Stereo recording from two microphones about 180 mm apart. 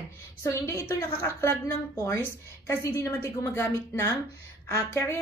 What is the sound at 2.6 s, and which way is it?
Speech, 15° left (ahead or behind).